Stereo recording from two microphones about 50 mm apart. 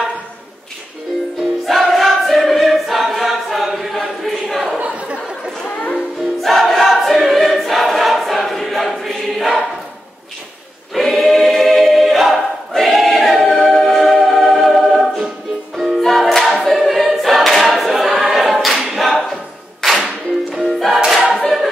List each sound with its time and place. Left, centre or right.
1.7 s choir: centre
4.7 s a sound: right
6.4 s choir: centre
11.0 s choir: centre
13.5 s music: centre
16.0 s choir: centre
20.6 s music: centre
21.4 s choir: centre